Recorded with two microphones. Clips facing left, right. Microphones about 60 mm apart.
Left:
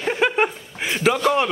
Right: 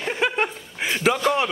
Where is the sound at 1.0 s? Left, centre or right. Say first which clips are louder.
Left 2 dB; centre.